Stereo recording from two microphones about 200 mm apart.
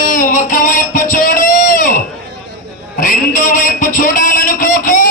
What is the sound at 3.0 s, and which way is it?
A man's voice, 45° left (ahead or behind).